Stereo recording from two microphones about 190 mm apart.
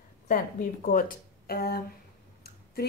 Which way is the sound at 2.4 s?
55° left (ahead or behind).